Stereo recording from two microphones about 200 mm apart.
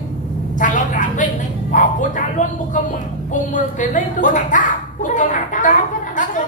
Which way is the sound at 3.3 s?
40° left (ahead or behind).